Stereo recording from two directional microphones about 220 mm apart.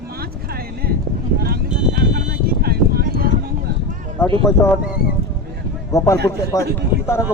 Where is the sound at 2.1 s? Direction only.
45° right (ahead or behind).